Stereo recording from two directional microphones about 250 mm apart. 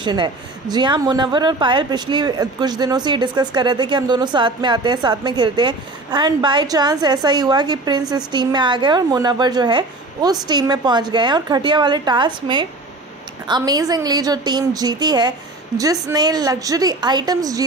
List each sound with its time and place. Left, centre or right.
0.0 s a woman's voice: centre
13.5 s a woman's voice: centre